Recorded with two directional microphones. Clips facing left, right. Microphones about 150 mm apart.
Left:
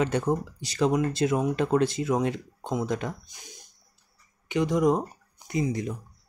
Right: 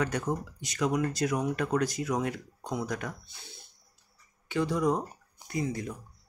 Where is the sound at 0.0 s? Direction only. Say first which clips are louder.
Left 5 dB; 30° left (ahead or behind).